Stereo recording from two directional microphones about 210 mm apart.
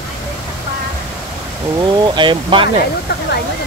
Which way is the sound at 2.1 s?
25° right (ahead or behind).